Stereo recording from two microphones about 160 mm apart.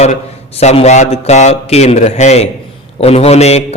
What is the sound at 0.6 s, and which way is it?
A man's voice, 45° left (ahead or behind).